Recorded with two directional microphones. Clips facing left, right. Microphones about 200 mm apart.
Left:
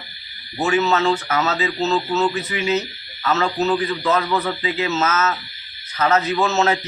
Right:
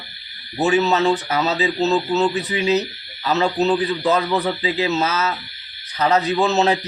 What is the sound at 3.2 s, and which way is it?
Speech, 15° right (ahead or behind).